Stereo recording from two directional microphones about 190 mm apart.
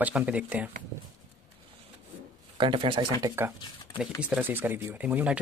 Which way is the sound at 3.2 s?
15° right (ahead or behind).